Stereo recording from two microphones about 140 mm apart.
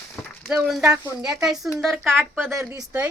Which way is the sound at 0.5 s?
5° right (ahead or behind).